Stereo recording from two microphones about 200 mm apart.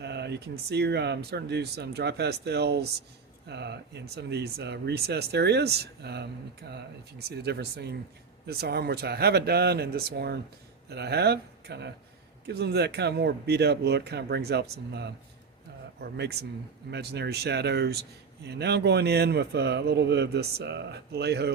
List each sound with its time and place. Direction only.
0.0 s speech: 55° right (ahead or behind)